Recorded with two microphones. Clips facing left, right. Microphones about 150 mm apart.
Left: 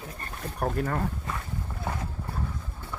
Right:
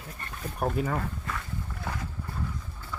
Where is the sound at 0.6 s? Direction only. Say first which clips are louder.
Even; 5° right (ahead or behind).